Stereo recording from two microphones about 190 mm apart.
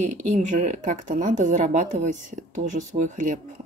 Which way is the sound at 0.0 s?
40° right (ahead or behind).